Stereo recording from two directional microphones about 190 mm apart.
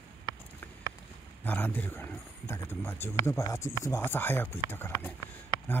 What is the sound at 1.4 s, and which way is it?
Speech, 10° left (ahead or behind).